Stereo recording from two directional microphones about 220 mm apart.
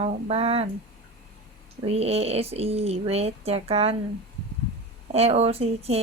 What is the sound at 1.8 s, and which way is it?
Speech, 30° right (ahead or behind).